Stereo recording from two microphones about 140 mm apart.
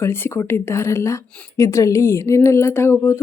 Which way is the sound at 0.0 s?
15° left (ahead or behind).